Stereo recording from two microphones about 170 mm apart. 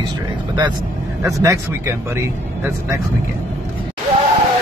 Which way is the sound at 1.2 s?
15° right (ahead or behind).